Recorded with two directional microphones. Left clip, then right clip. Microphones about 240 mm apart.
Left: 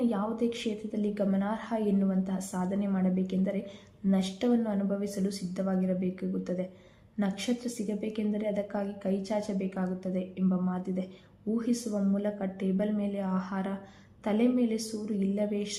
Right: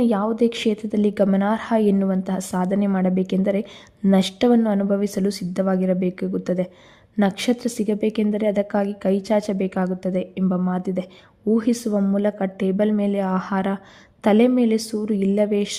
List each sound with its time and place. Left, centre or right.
0.0 s a woman's voice: right